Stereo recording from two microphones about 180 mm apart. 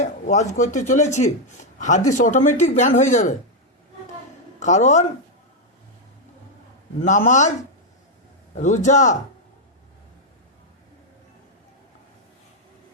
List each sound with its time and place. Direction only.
0.0 s speech: 40° left (ahead or behind)
4.6 s speech: 40° left (ahead or behind)
7.0 s a man's voice: 45° left (ahead or behind)
8.5 s a man's voice: 45° left (ahead or behind)